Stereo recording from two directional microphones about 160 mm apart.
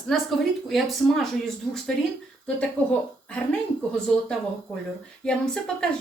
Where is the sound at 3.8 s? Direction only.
5° left (ahead or behind).